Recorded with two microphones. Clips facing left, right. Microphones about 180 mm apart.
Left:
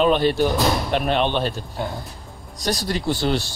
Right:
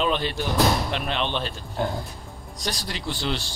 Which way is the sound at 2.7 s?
45° left (ahead or behind).